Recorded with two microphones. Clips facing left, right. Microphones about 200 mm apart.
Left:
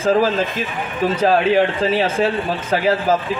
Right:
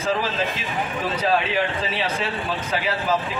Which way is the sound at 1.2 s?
45° left (ahead or behind).